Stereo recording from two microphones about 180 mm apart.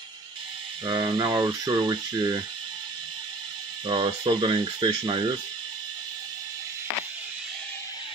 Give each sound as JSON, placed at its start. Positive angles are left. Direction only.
{"t": 0.8, "sound": "speech", "side_deg": -25}
{"t": 3.8, "sound": "speech", "side_deg": -30}